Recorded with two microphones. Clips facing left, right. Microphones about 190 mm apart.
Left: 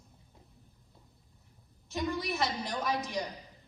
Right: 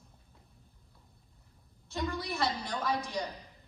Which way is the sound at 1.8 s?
20° left (ahead or behind).